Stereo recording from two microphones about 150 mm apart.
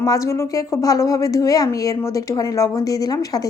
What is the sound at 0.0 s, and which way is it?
A woman's voice, 20° left (ahead or behind).